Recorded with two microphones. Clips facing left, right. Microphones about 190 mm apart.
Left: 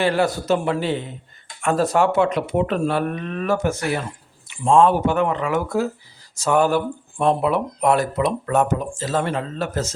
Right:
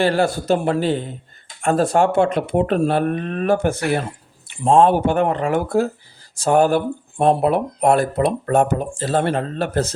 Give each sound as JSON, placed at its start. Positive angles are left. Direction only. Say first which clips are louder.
{"t": 0.0, "sound": "a man's voice", "louder": "right 2 dB", "side_deg": -30}
{"t": 1.7, "sound": "speech", "louder": "right 2 dB", "side_deg": -30}
{"t": 2.0, "sound": "a man's voice", "louder": "right 2 dB", "side_deg": -50}
{"t": 3.2, "sound": "speech", "louder": "right 3 dB", "side_deg": -50}
{"t": 4.6, "sound": "a man's voice", "louder": "right 2 dB", "side_deg": -40}
{"t": 5.0, "sound": "speech", "louder": "right 2 dB", "side_deg": -50}
{"t": 5.5, "sound": "a man's voice", "louder": "right 2 dB", "side_deg": -30}
{"t": 6.5, "sound": "speech", "louder": "right 3 dB", "side_deg": -50}